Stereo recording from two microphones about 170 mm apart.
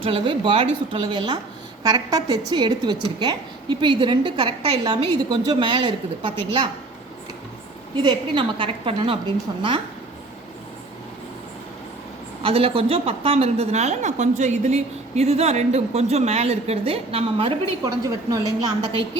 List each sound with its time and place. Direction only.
0.0 s a woman's voice: 30° right (ahead or behind)
7.9 s a woman's voice: 30° right (ahead or behind)
12.4 s a woman's voice: 35° right (ahead or behind)
17.8 s a woman's voice: 20° right (ahead or behind)